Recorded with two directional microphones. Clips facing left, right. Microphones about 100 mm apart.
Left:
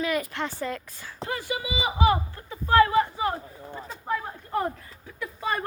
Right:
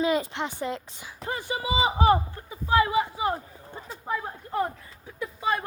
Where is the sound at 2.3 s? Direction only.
15° right (ahead or behind).